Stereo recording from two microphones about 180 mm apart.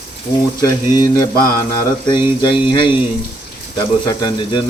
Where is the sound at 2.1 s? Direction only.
25° left (ahead or behind).